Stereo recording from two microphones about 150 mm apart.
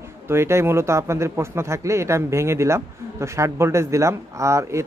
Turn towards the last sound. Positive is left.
turn(degrees=-20)  # may be behind; listen again after turning